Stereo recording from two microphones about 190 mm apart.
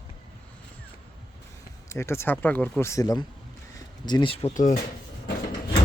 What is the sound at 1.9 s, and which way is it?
Speech, 15° left (ahead or behind).